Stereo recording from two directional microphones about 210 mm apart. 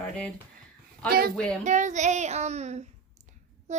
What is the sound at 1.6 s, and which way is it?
A child's voice, 35° right (ahead or behind).